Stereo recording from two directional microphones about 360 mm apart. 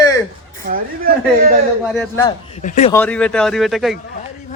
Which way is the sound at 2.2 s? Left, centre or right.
Centre.